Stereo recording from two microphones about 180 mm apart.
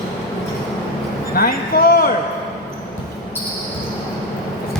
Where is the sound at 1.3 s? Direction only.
55° left (ahead or behind).